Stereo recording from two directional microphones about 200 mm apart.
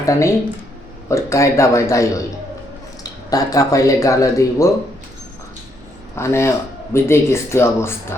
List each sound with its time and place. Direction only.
0.0 s speech: 15° left (ahead or behind)
6.1 s speech: 15° left (ahead or behind)